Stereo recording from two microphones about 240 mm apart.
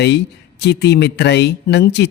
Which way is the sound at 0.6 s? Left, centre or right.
Left.